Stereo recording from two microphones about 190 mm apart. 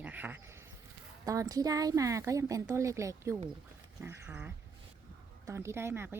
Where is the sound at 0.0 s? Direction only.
10° right (ahead or behind).